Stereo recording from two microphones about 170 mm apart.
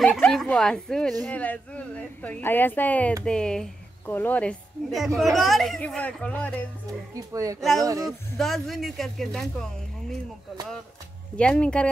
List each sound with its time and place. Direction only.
0.0 s a woman's voice: 5° left (ahead or behind)
7.2 s speech: 20° right (ahead or behind)
8.4 s a woman's voice: centre (ahead or behind)
11.3 s a woman's voice: 5° left (ahead or behind)